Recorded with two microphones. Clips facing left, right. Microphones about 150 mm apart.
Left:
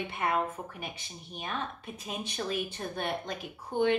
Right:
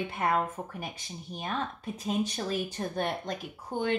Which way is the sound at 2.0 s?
40° right (ahead or behind).